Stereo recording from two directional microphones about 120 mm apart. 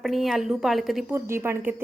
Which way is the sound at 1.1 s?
20° right (ahead or behind).